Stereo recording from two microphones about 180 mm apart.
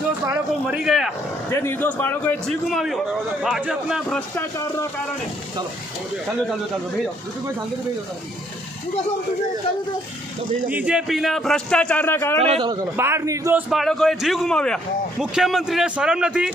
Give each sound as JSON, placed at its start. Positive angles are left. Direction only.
{"t": 0.3, "sound": "a man's voice", "side_deg": -5}
{"t": 1.5, "sound": "a man's voice", "side_deg": 15}
{"t": 4.4, "sound": "speech", "side_deg": 15}
{"t": 10.7, "sound": "a man's voice", "side_deg": -10}
{"t": 12.4, "sound": "a man's voice", "side_deg": -35}
{"t": 13.0, "sound": "a man's voice", "side_deg": -15}